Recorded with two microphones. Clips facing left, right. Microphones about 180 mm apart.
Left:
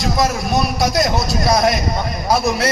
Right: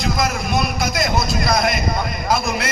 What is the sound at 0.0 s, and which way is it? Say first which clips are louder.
A man's voice: left 3 dB; 40° left (ahead or behind).